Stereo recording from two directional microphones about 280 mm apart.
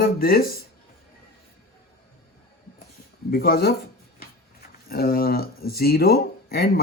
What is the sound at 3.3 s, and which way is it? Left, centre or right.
Speech, left.